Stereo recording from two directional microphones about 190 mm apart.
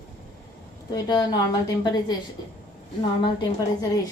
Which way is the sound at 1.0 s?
20° left (ahead or behind).